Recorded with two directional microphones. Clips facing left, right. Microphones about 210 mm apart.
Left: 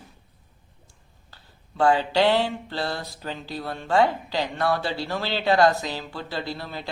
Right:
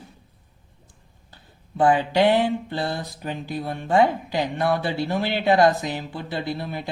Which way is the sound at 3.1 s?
15° right (ahead or behind).